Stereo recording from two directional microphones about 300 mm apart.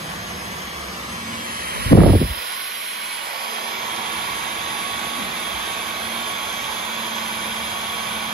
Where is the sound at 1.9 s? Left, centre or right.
Left.